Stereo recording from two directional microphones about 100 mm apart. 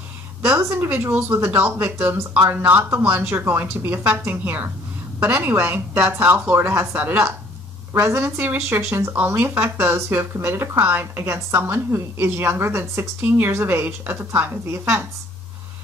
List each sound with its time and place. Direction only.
0.6 s speech: 20° right (ahead or behind)
2.1 s speech: 30° right (ahead or behind)